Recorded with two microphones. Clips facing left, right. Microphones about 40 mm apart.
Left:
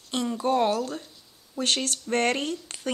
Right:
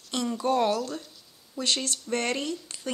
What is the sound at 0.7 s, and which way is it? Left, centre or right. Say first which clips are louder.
Speech: left 2 dB; left.